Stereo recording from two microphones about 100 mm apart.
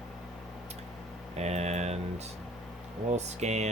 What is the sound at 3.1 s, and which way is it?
Speech, 90° right.